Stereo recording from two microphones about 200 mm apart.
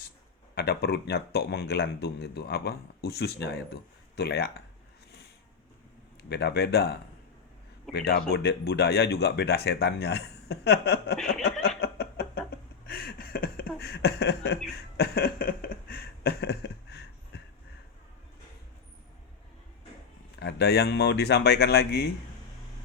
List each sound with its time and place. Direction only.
0.5 s speech: 55° left (ahead or behind)
6.2 s speech: 55° left (ahead or behind)
8.0 s speech: 55° left (ahead or behind)
11.8 s a sound: 50° left (ahead or behind)
20.4 s speech: 55° left (ahead or behind)